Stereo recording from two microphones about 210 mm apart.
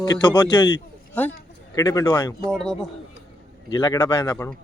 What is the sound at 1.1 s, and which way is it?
A man's voice, 5° left (ahead or behind).